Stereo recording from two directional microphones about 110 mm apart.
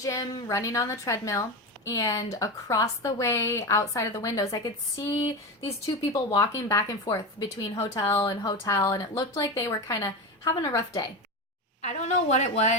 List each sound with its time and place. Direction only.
0.0 s a woman's voice: 30° left (ahead or behind)
6.3 s a woman's voice: 35° left (ahead or behind)
8.6 s a woman's voice: 30° left (ahead or behind)
11.8 s a woman's voice: 90° left